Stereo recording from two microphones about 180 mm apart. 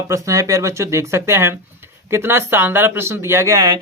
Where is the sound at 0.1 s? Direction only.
15° right (ahead or behind).